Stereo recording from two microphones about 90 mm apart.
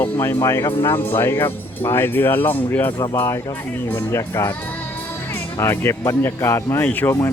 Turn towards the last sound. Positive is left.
turn(degrees=20)  # may be behind; listen again after turning